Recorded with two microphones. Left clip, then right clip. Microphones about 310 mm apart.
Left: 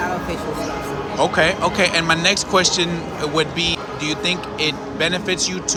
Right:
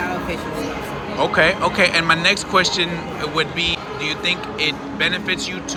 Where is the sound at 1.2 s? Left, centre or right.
Centre.